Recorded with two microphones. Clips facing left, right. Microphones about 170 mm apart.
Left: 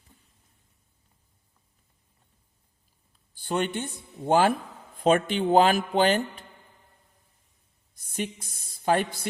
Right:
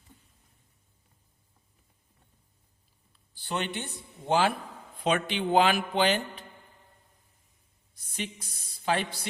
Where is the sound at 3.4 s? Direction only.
40° left (ahead or behind).